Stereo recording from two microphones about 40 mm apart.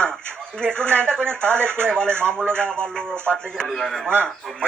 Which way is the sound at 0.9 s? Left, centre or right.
Left.